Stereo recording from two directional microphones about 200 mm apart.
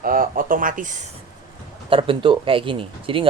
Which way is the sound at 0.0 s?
45° right (ahead or behind).